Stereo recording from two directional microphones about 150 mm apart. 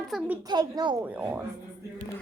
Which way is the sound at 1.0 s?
10° right (ahead or behind).